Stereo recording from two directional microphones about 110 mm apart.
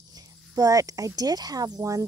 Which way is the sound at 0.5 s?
35° right (ahead or behind).